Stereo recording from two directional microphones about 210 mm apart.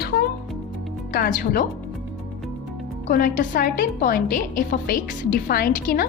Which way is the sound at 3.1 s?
45° left (ahead or behind).